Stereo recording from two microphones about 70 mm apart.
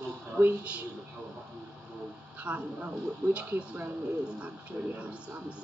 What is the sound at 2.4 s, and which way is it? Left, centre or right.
Speech, centre.